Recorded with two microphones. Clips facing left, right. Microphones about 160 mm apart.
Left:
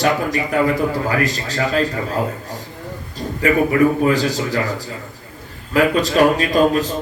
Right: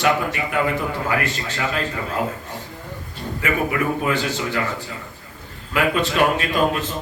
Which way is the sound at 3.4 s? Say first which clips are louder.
Left 8 dB; 35° left (ahead or behind).